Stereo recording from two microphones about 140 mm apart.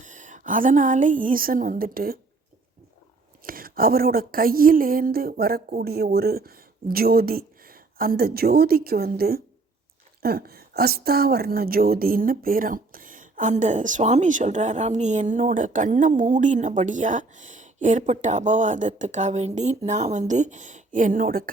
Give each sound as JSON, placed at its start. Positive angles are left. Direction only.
{"t": 0.0, "sound": "a woman's voice", "side_deg": -60}
{"t": 3.4, "sound": "speech", "side_deg": -90}